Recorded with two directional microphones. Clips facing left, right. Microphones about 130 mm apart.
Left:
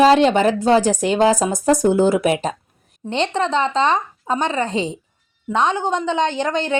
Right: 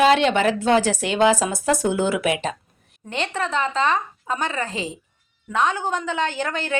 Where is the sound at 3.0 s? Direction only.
25° left (ahead or behind).